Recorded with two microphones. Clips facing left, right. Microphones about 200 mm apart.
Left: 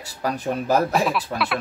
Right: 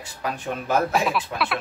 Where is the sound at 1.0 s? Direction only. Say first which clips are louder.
Left 2 dB; centre (ahead or behind).